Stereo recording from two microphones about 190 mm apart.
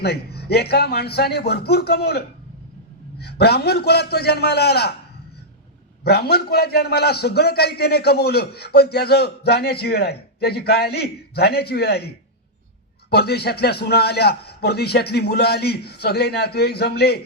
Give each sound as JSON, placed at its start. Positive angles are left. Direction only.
{"t": 0.0, "sound": "a man's voice", "side_deg": 55}
{"t": 6.1, "sound": "a man's voice", "side_deg": 55}